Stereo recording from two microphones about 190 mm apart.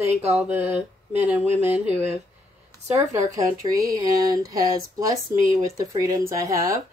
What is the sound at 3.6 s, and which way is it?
Speech, 25° right (ahead or behind).